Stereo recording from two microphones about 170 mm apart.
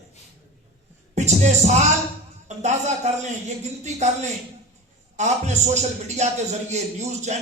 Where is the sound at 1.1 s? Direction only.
45° right (ahead or behind).